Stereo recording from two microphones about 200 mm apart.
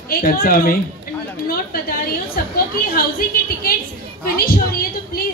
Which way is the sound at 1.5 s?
45° left (ahead or behind).